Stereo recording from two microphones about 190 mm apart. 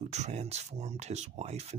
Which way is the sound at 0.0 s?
35° right (ahead or behind).